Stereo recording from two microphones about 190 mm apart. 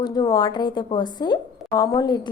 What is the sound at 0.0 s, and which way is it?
A woman's voice, 20° left (ahead or behind).